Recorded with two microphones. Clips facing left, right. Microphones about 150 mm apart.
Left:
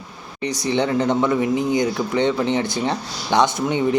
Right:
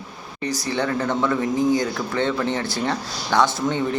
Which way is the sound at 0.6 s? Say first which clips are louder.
Left 5 dB; 20° left (ahead or behind).